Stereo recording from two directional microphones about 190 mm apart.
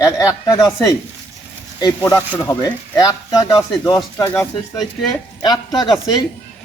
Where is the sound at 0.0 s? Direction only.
15° left (ahead or behind).